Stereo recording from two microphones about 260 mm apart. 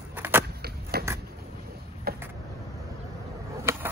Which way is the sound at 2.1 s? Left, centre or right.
Right.